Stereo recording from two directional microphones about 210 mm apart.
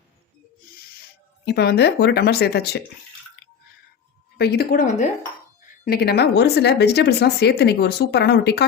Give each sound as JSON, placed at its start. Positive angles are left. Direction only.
{"t": 1.5, "sound": "speech", "side_deg": 50}
{"t": 4.4, "sound": "speech", "side_deg": 50}